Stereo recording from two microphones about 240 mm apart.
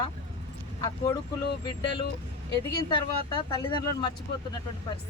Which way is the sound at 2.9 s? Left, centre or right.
Centre.